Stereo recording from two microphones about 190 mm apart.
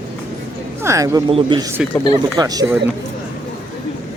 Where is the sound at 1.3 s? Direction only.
25° right (ahead or behind).